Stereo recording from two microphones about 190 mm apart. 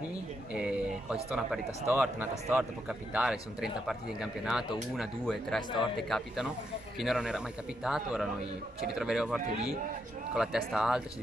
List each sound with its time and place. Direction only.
0.5 s a sound: 5° right (ahead or behind)
1.9 s a man's voice: 10° right (ahead or behind)
5.6 s a man's voice: 25° left (ahead or behind)
5.9 s a man's voice: centre (ahead or behind)